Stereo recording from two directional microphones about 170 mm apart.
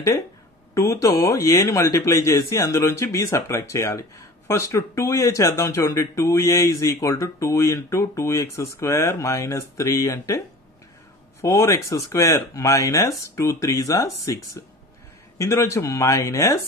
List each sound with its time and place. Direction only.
0.7 s speech: 15° left (ahead or behind)
11.4 s speech: 15° left (ahead or behind)